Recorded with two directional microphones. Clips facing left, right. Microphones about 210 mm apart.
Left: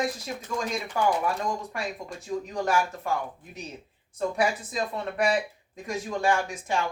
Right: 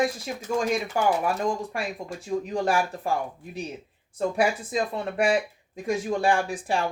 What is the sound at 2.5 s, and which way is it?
Speech, 30° right (ahead or behind).